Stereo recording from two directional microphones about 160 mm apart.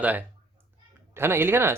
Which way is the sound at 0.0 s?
10° right (ahead or behind).